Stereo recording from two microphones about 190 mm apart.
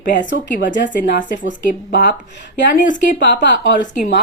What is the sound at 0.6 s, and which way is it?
Speech, 70° left (ahead or behind).